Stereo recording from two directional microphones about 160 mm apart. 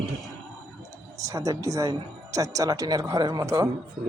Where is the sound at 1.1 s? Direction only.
20° right (ahead or behind).